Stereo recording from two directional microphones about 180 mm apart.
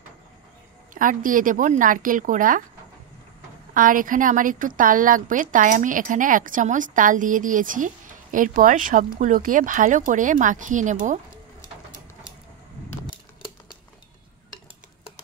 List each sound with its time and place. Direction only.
0.9 s a woman's voice: 50° right (ahead or behind)
3.7 s a woman's voice: 50° right (ahead or behind)